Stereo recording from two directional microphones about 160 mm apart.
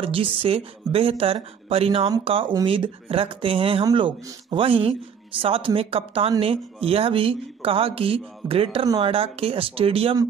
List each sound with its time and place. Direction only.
0.0 s speech: 35° right (ahead or behind)